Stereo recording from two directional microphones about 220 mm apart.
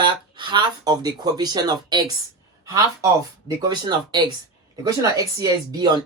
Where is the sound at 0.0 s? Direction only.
20° right (ahead or behind).